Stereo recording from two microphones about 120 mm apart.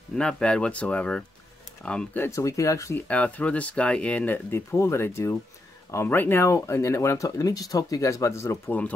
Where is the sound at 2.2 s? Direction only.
25° left (ahead or behind).